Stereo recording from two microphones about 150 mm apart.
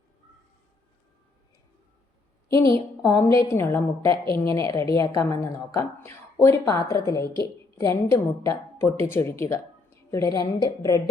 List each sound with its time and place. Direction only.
2.5 s a woman's voice: 20° left (ahead or behind)